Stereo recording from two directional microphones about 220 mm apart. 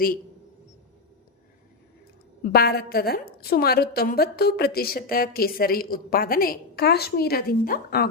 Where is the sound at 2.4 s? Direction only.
45° left (ahead or behind).